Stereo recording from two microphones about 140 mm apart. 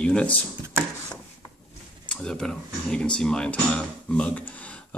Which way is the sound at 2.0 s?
5° left (ahead or behind).